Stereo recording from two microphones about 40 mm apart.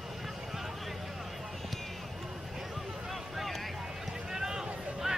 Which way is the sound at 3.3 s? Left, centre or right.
Centre.